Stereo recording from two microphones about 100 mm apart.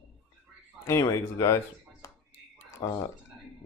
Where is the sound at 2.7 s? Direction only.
30° left (ahead or behind).